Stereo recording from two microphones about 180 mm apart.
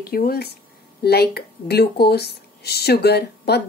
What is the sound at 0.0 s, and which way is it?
Speech, 60° left (ahead or behind).